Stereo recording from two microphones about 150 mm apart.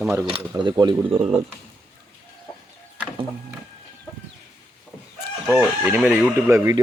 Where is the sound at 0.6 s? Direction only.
30° right (ahead or behind).